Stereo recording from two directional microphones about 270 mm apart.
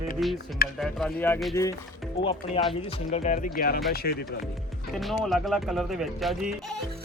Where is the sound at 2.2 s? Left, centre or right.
Centre; by 4.4 s left.